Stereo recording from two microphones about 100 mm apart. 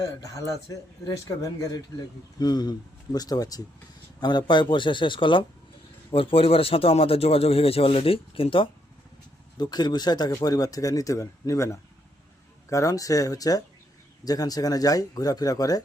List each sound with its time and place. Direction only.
0.2 s a man's voice: 35° left (ahead or behind); by 8.7 s 60° left (ahead or behind)
9.6 s speech: 45° left (ahead or behind)